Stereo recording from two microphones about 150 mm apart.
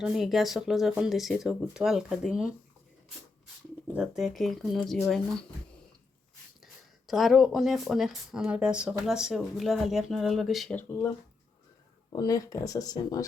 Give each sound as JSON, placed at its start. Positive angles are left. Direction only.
{"t": 0.0, "sound": "speech", "side_deg": -5}
{"t": 3.9, "sound": "speech", "side_deg": -5}
{"t": 7.1, "sound": "speech", "side_deg": 0}
{"t": 10.8, "sound": "speech", "side_deg": 15}
{"t": 12.1, "sound": "speech", "side_deg": 25}